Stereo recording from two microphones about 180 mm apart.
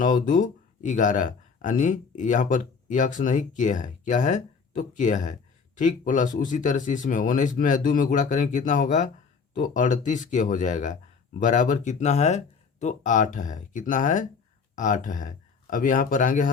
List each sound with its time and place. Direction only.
0.0 s speech: 45° left (ahead or behind)